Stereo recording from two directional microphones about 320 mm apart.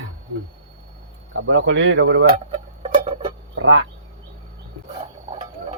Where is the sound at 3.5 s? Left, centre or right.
Right.